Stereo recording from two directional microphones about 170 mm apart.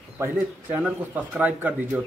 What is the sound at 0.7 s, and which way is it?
Speech, 10° right (ahead or behind).